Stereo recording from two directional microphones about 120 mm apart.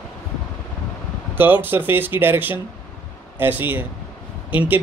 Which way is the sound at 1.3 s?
15° right (ahead or behind).